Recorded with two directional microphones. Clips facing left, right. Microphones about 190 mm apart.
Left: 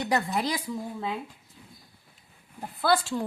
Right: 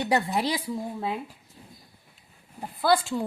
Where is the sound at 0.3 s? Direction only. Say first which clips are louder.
Right 2 dB; 30° right (ahead or behind).